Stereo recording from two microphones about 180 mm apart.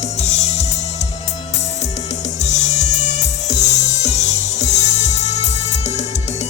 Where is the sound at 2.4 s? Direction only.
40° left (ahead or behind).